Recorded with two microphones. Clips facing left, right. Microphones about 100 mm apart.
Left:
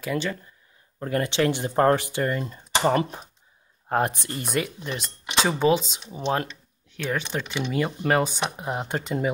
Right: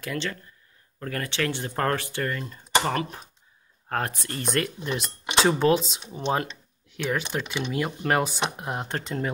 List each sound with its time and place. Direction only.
0.0 s speech: 10° left (ahead or behind)
0.9 s speech: 20° left (ahead or behind)
4.5 s speech: 5° left (ahead or behind)